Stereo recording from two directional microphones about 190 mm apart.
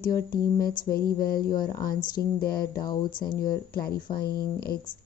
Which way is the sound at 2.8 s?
20° left (ahead or behind).